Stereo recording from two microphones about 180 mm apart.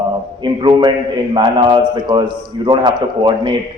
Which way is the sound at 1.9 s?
25° right (ahead or behind).